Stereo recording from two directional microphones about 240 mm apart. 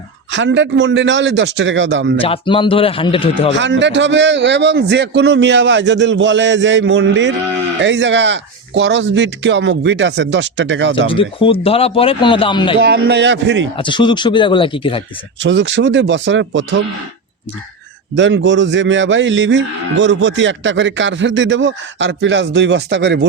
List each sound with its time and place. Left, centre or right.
0.3 s speech: right
2.2 s speech: left
3.6 s speech: right
11.1 s speech: left
12.8 s speech: right
13.7 s speech: left
15.4 s speech: right
18.1 s speech: right